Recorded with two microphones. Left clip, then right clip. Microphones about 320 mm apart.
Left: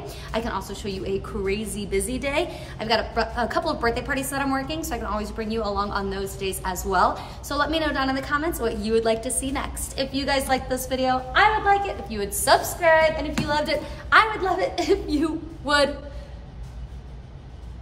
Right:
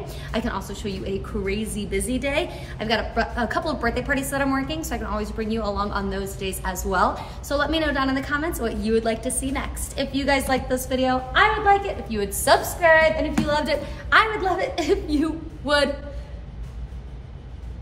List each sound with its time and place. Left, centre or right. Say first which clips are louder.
0.3 s a woman's voice: even; centre